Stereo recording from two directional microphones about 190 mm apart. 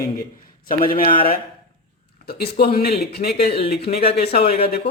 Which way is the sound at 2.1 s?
55° left (ahead or behind).